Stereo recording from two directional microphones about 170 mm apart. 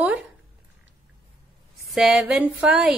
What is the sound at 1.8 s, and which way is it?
A woman's voice, centre (ahead or behind).